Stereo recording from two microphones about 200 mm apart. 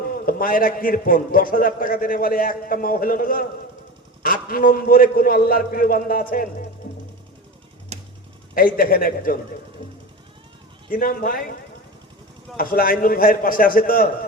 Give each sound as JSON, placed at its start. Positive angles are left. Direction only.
{"t": 0.1, "sound": "a man's voice", "side_deg": 45}
{"t": 7.9, "sound": "a sound", "side_deg": -35}
{"t": 8.5, "sound": "a man's voice", "side_deg": 45}
{"t": 10.9, "sound": "a man's voice", "side_deg": 45}
{"t": 12.5, "sound": "a man's voice", "side_deg": 45}